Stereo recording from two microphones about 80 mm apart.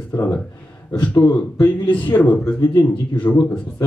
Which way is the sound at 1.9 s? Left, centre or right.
Left.